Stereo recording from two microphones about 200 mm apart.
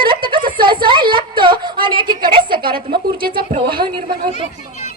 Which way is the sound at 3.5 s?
25° right (ahead or behind).